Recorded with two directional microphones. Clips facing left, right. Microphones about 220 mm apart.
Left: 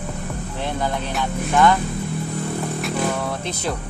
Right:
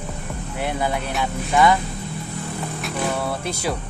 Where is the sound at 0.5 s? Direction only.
10° right (ahead or behind).